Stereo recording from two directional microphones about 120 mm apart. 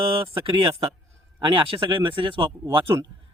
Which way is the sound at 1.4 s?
45° right (ahead or behind).